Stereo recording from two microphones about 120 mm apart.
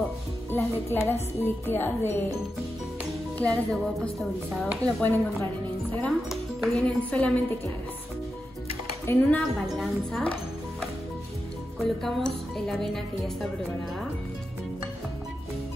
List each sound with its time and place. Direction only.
0.5 s a woman's voice: 20° left (ahead or behind)
3.3 s speech: 10° left (ahead or behind)
5.0 s a woman's voice: 15° left (ahead or behind)
9.0 s a woman's voice: 15° left (ahead or behind)
9.8 s speech: 5° left (ahead or behind)
12.0 s speech: 5° left (ahead or behind)